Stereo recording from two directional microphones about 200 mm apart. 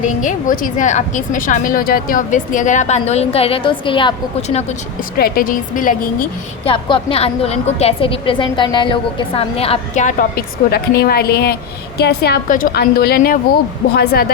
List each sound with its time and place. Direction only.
0.0 s a woman's voice: 40° left (ahead or behind)
5.1 s a woman's voice: 45° left (ahead or behind)
6.7 s a woman's voice: 25° left (ahead or behind); by 14.3 s 50° left (ahead or behind)